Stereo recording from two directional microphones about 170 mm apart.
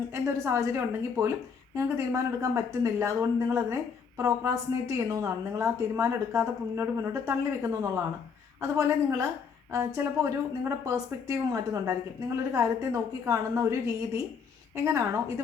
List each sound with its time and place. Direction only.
0.1 s a woman's voice: 15° right (ahead or behind)